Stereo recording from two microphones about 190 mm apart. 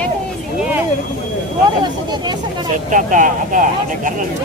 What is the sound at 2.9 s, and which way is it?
Speech, 45° right (ahead or behind).